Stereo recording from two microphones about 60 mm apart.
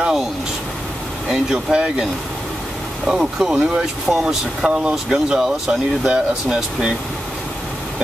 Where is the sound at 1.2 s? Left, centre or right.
Centre.